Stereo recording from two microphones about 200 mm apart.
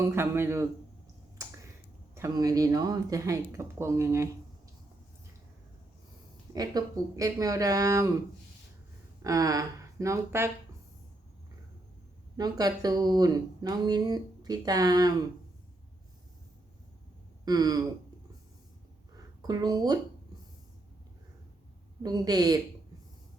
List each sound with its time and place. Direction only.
0.0 s speech: 10° right (ahead or behind)
1.4 s finger snapping: 15° right (ahead or behind)
2.1 s speech: 15° right (ahead or behind)
6.5 s speech: 20° right (ahead or behind)
9.2 s speech: 15° right (ahead or behind)
12.4 s speech: 20° right (ahead or behind)
17.4 s a sound: 20° right (ahead or behind)
19.4 s speech: 20° right (ahead or behind)
22.0 s speech: 20° right (ahead or behind)